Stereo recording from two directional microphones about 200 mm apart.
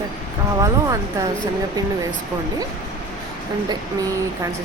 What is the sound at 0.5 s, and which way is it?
Speech, 15° right (ahead or behind).